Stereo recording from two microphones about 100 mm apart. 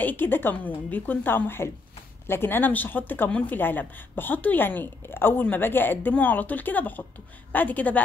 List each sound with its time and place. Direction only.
0.0 s a woman's voice: 20° left (ahead or behind)